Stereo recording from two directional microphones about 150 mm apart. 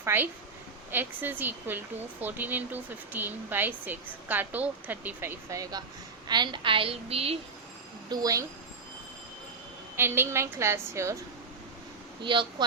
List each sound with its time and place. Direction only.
0.0 s a woman's voice: 15° right (ahead or behind); by 7.3 s 40° right (ahead or behind)
8.1 s a woman's voice: 25° right (ahead or behind)
9.9 s speech: 15° right (ahead or behind)
12.2 s a woman's voice: 30° right (ahead or behind)